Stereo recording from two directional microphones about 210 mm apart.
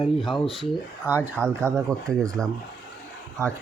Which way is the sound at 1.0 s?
10° right (ahead or behind).